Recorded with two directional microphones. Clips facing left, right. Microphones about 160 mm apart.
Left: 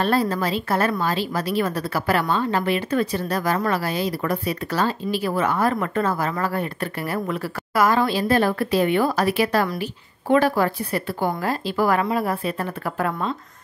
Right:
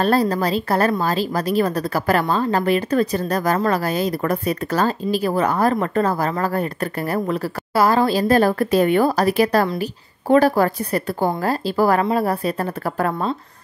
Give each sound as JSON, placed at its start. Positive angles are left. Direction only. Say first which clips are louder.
{"t": 0.0, "sound": "a woman's voice", "louder": "right 3 dB", "side_deg": -40}